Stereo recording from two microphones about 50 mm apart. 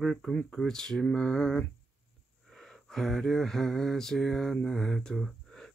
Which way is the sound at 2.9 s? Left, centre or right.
Centre.